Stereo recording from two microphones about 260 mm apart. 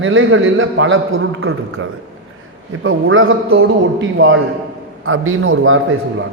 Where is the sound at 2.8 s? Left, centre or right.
Right.